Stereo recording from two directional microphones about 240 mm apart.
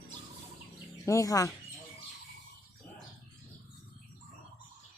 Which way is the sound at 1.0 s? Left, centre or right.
Centre.